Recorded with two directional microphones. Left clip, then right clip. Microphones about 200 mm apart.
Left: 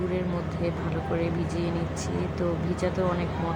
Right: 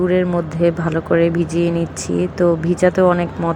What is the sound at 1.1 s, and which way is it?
Speech, 35° right (ahead or behind).